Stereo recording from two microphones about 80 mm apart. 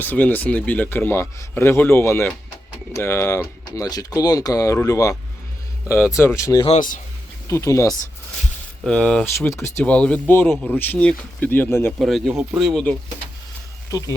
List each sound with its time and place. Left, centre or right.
0.0 s speech: left
8.9 s speech: centre
9.5 s speech: left
9.8 s speech: centre
11.9 s speech: centre